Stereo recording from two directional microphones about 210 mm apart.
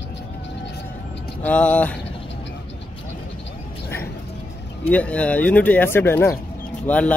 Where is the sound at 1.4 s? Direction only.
5° left (ahead or behind).